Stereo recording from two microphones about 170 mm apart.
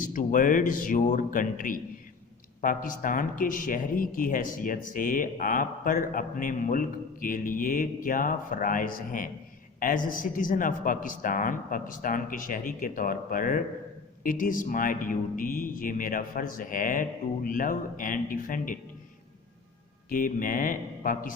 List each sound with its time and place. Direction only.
0.1 s speech: 50° left (ahead or behind)
20.1 s speech: 55° left (ahead or behind)